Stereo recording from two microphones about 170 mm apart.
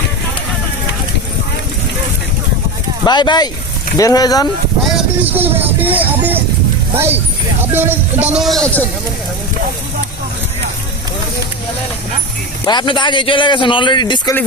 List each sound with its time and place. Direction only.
3.0 s a man's voice: 25° left (ahead or behind)
4.9 s a sound: 10° right (ahead or behind)
5.8 s speech: 10° right (ahead or behind)
12.6 s a man's voice: 25° left (ahead or behind)